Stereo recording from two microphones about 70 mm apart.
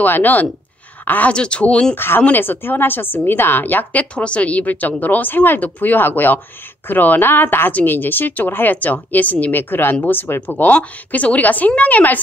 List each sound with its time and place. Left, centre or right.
0.0 s a woman's voice: left
1.3 s speech: centre
2.0 s a woman's voice: left